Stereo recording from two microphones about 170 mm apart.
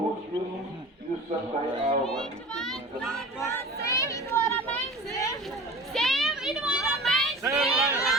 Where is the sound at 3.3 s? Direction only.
15° left (ahead or behind).